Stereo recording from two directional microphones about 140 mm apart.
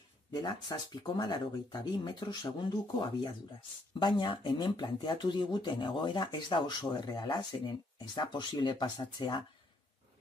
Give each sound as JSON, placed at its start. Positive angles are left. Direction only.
{"t": 0.3, "sound": "speech", "side_deg": 30}